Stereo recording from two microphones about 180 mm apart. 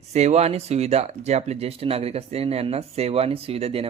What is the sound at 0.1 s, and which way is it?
Speech, 35° right (ahead or behind).